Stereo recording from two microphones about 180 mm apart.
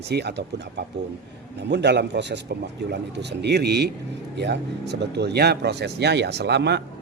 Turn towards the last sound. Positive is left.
turn(degrees=-65)  # may be behind; listen again after turning